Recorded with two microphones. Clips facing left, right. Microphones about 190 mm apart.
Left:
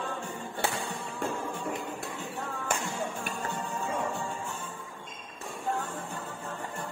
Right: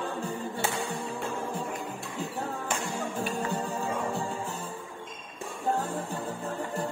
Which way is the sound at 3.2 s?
35° right (ahead or behind).